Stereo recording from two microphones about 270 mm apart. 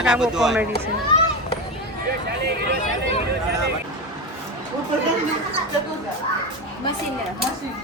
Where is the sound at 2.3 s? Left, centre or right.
Right.